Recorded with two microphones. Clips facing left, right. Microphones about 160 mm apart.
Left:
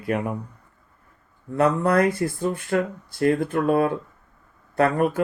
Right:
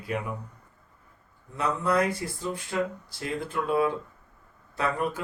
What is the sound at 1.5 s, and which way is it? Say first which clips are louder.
Speech: left 6 dB; 60° left (ahead or behind).